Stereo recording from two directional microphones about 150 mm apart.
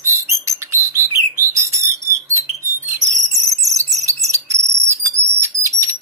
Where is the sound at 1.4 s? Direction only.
20° right (ahead or behind).